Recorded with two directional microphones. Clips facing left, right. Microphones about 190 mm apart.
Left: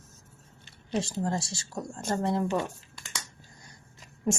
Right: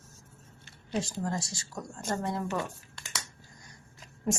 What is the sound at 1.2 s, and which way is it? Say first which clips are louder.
A woman's voice: left 3 dB; 30° left (ahead or behind).